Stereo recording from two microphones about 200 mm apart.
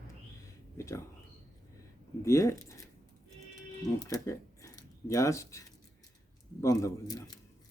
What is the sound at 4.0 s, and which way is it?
Speech, 15° left (ahead or behind).